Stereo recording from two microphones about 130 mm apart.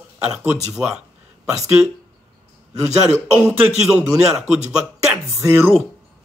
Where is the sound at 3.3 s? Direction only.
5° right (ahead or behind).